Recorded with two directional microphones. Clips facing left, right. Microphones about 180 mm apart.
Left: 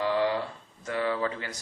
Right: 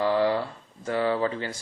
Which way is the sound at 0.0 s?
35° right (ahead or behind).